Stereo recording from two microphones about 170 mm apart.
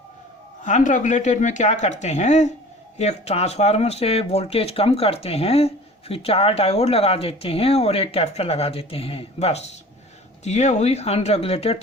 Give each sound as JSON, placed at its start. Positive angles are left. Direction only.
{"t": 0.6, "sound": "speech", "side_deg": 45}